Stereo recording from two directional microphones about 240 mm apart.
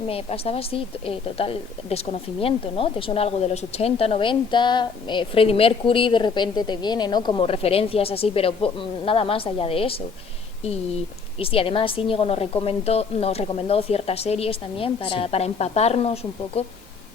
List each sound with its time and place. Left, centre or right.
0.1 s a woman's voice: left
11.3 s a woman's voice: left